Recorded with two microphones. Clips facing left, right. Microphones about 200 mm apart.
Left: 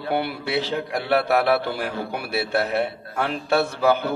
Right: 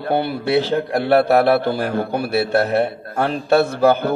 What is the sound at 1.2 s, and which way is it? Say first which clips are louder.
A man's voice: right 5 dB; 40° right (ahead or behind).